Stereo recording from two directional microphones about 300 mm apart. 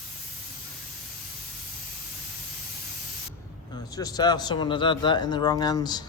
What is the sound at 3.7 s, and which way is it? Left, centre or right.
Speech, centre.